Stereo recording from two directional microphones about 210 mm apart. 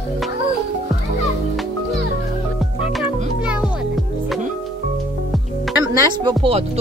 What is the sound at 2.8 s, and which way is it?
Music, 5° right (ahead or behind).